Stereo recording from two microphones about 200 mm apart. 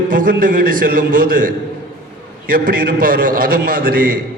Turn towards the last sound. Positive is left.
turn(degrees=-45)  # may be behind; listen again after turning